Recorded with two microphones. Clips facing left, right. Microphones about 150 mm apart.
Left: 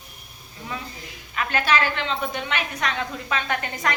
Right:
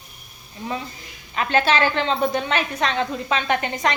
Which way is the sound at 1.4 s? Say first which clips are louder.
Right 4 dB; 25° right (ahead or behind).